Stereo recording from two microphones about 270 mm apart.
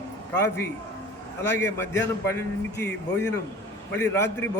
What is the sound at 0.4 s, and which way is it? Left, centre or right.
A man's voice, centre.